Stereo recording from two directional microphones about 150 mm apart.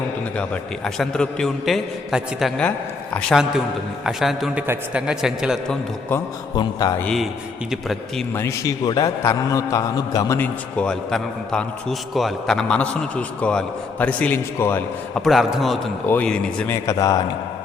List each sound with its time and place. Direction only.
0.3 s a man's voice: 5° left (ahead or behind)
6.6 s a man's voice: 30° left (ahead or behind)
7.7 s a man's voice: centre (ahead or behind)
8.4 s a man's voice: 20° left (ahead or behind)
15.2 s a man's voice: centre (ahead or behind)
16.7 s a man's voice: 20° left (ahead or behind)